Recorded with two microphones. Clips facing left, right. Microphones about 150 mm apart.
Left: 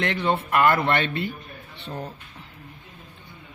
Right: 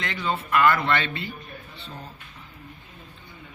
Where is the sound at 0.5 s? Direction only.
45° left (ahead or behind).